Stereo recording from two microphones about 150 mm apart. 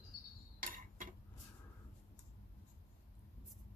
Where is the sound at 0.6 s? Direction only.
65° right (ahead or behind).